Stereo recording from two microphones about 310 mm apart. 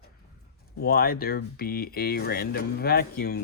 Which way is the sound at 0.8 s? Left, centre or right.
Left.